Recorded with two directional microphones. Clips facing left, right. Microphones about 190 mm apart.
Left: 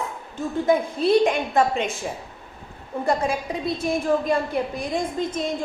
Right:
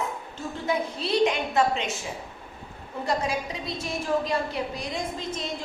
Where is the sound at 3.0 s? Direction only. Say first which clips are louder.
Left 4 dB; 55° left (ahead or behind).